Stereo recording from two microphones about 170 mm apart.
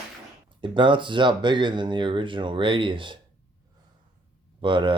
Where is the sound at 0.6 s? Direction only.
30° right (ahead or behind).